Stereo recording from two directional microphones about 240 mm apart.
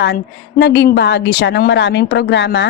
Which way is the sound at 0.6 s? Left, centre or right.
Left.